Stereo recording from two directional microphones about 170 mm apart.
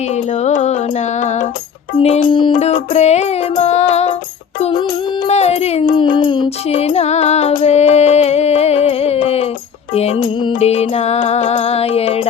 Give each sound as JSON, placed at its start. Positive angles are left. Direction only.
{"t": 0.4, "sound": "music", "side_deg": 40}
{"t": 4.6, "sound": "music", "side_deg": 30}